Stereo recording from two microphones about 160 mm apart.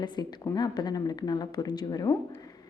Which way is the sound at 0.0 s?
25° left (ahead or behind).